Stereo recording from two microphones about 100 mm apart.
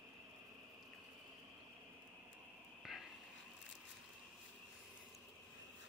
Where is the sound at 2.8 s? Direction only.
5° right (ahead or behind).